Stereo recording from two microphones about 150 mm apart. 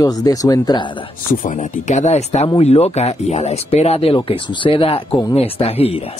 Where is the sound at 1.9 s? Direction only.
50° left (ahead or behind).